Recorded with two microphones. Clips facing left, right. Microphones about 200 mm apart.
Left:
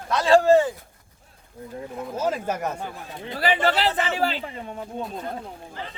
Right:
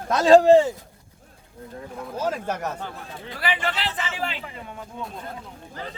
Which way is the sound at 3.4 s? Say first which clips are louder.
Left 6 dB; 40° left (ahead or behind).